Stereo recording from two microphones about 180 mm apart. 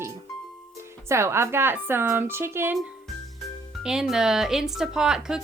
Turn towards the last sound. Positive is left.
turn(degrees=-5)  # may be behind; listen again after turning